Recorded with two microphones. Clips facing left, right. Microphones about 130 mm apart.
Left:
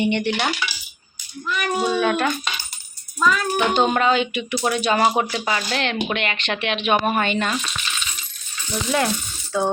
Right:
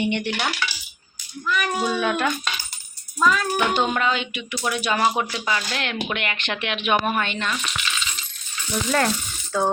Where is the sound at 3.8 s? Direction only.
30° left (ahead or behind).